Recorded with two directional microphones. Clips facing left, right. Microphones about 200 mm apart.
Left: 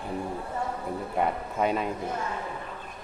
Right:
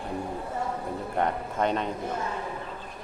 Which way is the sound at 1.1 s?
5° left (ahead or behind).